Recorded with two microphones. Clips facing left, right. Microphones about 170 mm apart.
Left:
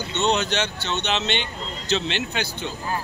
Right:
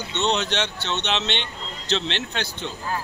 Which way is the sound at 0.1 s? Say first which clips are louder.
Left 1 dB; 5° left (ahead or behind).